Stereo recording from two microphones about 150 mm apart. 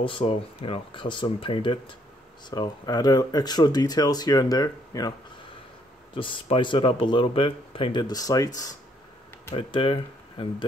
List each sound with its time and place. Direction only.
0.0 s speech: 40° left (ahead or behind)
6.1 s speech: 35° left (ahead or behind)
9.6 s speech: 35° left (ahead or behind)